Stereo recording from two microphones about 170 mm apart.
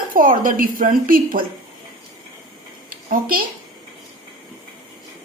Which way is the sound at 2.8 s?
60° right (ahead or behind).